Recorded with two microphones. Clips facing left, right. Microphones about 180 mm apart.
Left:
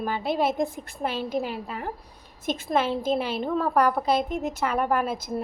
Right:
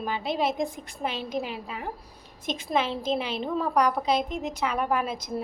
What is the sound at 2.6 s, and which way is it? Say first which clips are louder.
Speech: left 2 dB; 5° left (ahead or behind).